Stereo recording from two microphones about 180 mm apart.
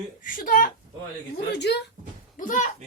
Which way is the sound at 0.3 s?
50° left (ahead or behind).